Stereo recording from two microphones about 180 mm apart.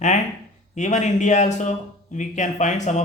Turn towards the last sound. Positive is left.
turn(degrees=40)  # may be behind; listen again after turning